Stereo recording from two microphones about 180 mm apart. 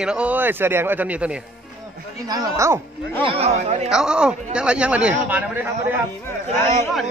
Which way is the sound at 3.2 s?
35° right (ahead or behind).